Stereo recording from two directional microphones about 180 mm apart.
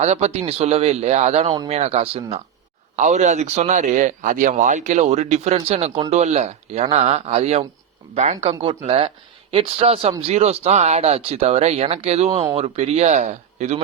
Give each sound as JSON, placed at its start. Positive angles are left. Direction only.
{"t": 0.0, "sound": "a man's voice", "side_deg": -35}